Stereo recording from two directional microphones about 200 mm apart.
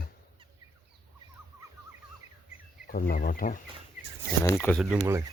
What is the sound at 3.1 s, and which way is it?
Speech, 45° left (ahead or behind).